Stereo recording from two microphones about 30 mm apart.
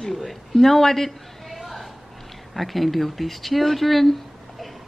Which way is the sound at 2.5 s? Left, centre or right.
Centre.